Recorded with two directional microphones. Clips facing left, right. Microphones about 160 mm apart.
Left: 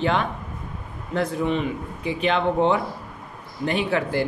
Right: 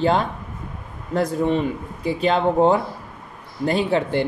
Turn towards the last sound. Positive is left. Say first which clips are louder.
# right 3 dB
turn(degrees=-25)  # may be behind; listen again after turning